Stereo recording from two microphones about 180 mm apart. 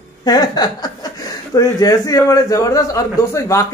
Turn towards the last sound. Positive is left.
turn(degrees=15)  # may be behind; listen again after turning